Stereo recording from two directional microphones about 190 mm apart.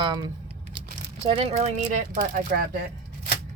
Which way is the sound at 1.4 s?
35° right (ahead or behind).